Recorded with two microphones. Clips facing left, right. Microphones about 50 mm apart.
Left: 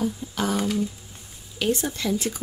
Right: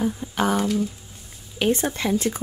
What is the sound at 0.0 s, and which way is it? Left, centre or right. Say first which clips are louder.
Speech: right 3 dB; right.